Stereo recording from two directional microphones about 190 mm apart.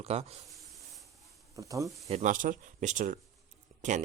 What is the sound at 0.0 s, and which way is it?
Speech, 35° right (ahead or behind).